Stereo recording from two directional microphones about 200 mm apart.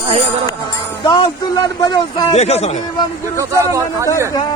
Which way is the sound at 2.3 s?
30° left (ahead or behind).